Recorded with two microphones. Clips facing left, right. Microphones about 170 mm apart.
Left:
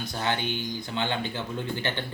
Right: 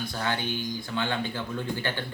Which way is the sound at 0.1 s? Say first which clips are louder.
Left 4 dB; 20° left (ahead or behind).